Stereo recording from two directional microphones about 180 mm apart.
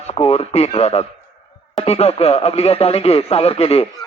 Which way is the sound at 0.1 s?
35° left (ahead or behind).